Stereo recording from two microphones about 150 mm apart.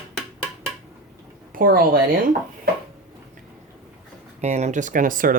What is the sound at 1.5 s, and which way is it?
Speech, 80° right.